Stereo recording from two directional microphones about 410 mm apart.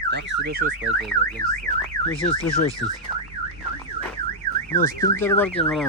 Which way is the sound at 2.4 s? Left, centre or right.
Centre.